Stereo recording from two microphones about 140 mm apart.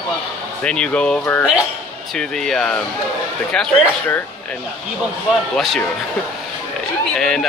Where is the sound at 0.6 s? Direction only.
5° left (ahead or behind).